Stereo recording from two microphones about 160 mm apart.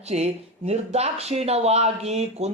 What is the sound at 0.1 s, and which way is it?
Speech, 40° right (ahead or behind).